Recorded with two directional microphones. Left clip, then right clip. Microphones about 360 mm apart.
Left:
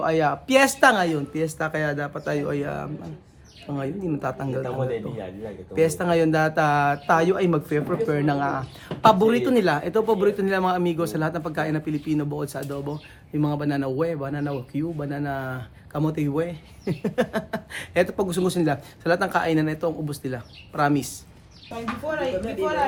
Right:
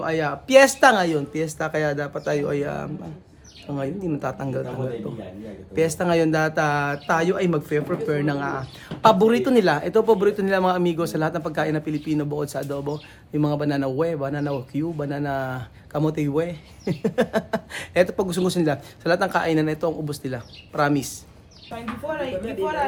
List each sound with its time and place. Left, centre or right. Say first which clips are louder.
0.0 s speech: left 3 dB; centre
5.7 s speech: even; centre